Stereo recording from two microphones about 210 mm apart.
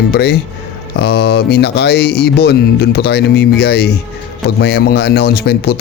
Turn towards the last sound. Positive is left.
turn(degrees=50)  # may be behind; listen again after turning